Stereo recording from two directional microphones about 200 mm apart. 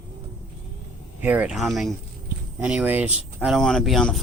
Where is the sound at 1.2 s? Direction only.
10° right (ahead or behind).